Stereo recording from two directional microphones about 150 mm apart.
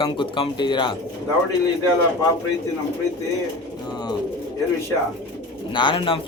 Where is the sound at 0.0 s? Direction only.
35° left (ahead or behind).